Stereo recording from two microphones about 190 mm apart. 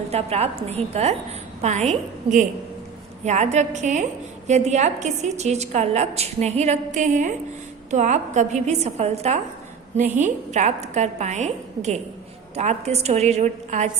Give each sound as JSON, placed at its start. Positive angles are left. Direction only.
{"t": 0.1, "sound": "a woman's voice", "side_deg": -35}